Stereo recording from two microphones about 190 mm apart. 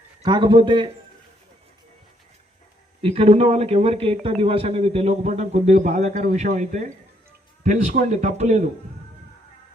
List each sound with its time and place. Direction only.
0.3 s a man's voice: 25° right (ahead or behind)
3.0 s a man's voice: 30° right (ahead or behind)